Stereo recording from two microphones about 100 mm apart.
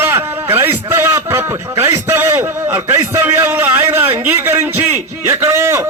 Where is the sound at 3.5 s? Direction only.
20° right (ahead or behind).